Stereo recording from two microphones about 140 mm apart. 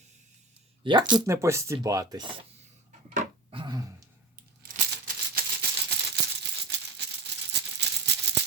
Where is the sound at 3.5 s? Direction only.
30° right (ahead or behind).